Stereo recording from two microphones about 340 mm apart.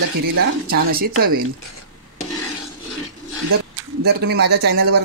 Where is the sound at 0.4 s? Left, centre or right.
Right.